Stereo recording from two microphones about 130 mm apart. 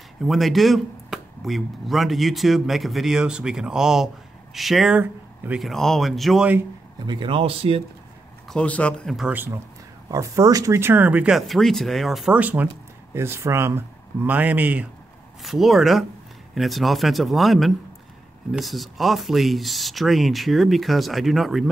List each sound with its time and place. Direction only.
0.2 s speech: centre (ahead or behind)
5.7 s speech: centre (ahead or behind)
7.1 s speech: 40° right (ahead or behind)
8.5 s speech: 10° left (ahead or behind)
9.3 s speech: 15° right (ahead or behind)
10.0 s speech: 25° right (ahead or behind); by 11.3 s 10° right (ahead or behind)
11.3 s speech: centre (ahead or behind)
12.4 s speech: 10° right (ahead or behind)
15.4 s speech: centre (ahead or behind)